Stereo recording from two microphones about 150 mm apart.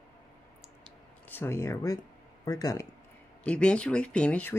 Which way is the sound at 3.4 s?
5° left (ahead or behind).